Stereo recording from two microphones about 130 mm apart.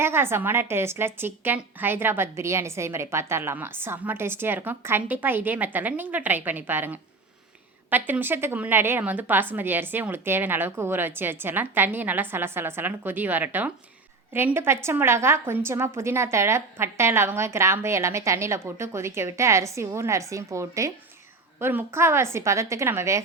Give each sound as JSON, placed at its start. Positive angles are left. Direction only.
{"t": 0.0, "sound": "a woman's voice", "side_deg": -20}